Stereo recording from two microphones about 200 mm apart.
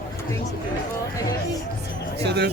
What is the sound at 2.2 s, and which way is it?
Speech, 55° right (ahead or behind).